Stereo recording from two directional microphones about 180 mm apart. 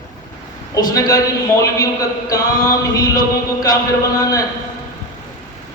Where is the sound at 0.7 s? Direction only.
20° left (ahead or behind).